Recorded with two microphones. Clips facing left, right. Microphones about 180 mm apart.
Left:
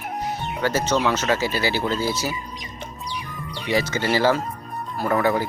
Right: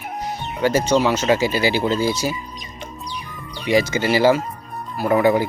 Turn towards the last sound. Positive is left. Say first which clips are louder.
# right 4 dB
turn(degrees=-15)  # may be behind; listen again after turning